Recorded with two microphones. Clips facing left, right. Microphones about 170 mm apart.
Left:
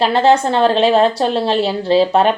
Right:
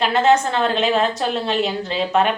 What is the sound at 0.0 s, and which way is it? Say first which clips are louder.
A woman's voice: left 3 dB; 30° left (ahead or behind).